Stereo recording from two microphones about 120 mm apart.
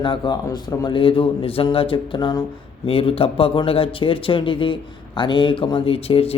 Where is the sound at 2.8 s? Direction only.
50° left (ahead or behind).